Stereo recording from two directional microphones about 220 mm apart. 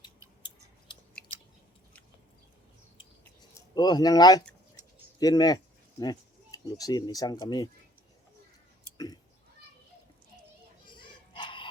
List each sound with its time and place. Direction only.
3.8 s speech: 20° left (ahead or behind)
10.8 s children playing: 20° left (ahead or behind)